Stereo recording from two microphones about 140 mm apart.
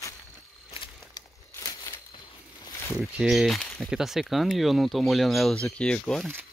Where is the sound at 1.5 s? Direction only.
25° left (ahead or behind).